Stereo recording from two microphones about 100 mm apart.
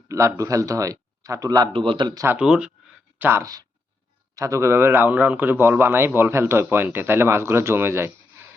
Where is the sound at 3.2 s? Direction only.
25° right (ahead or behind).